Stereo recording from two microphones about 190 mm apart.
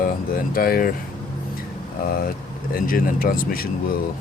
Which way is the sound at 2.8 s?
50° left (ahead or behind).